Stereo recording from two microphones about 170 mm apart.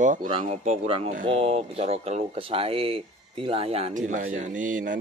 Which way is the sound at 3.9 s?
50° right (ahead or behind).